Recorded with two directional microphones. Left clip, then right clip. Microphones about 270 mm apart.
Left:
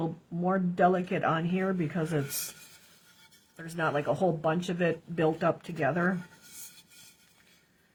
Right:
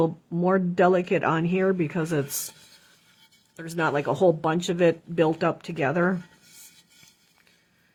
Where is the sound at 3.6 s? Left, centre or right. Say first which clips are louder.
Right 5 dB; right.